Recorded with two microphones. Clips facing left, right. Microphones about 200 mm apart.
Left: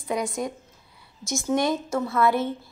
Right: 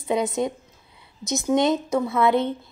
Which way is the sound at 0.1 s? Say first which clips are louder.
Right 4 dB; 25° right (ahead or behind).